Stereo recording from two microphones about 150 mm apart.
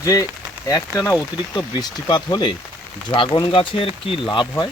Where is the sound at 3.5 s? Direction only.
35° left (ahead or behind).